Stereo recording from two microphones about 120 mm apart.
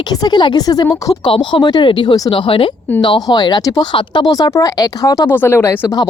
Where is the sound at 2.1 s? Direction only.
30° left (ahead or behind).